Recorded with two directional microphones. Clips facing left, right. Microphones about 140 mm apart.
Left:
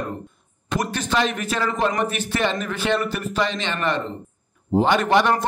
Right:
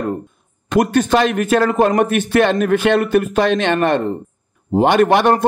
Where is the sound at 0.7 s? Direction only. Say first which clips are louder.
Right 10 dB; 50° right (ahead or behind).